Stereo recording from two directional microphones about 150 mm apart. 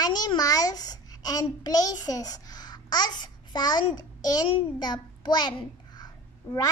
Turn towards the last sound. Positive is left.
turn(degrees=25)  # may be behind; listen again after turning